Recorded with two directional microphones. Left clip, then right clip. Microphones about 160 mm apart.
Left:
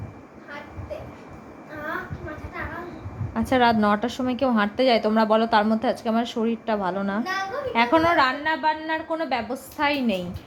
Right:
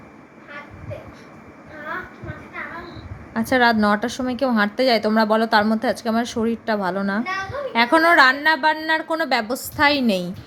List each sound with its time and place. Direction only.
3.3 s a woman's voice: 5° right (ahead or behind); by 10.2 s 25° right (ahead or behind)